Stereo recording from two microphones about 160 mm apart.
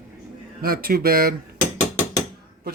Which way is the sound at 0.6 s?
70° right (ahead or behind).